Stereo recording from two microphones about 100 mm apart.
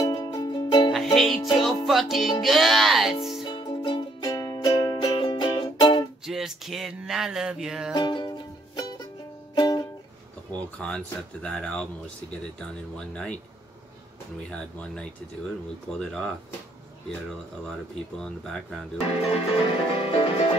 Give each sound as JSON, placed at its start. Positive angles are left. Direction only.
{"t": 0.0, "sound": "music", "side_deg": 40}
{"t": 1.1, "sound": "music", "side_deg": 0}
{"t": 2.4, "sound": "speech", "side_deg": 0}
{"t": 3.4, "sound": "music", "side_deg": 55}
{"t": 6.2, "sound": "speech", "side_deg": -5}
{"t": 7.9, "sound": "music", "side_deg": 45}
{"t": 10.8, "sound": "speech", "side_deg": 10}
{"t": 12.9, "sound": "speech", "side_deg": 10}
{"t": 14.5, "sound": "speech", "side_deg": 10}
{"t": 18.2, "sound": "speech", "side_deg": 5}
{"t": 19.7, "sound": "music", "side_deg": 65}